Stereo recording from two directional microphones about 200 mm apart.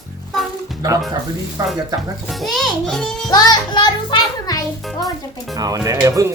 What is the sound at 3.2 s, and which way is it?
A child's voice, 20° left (ahead or behind).